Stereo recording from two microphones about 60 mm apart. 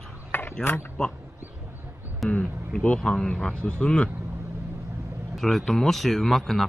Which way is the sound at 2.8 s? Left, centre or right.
Centre.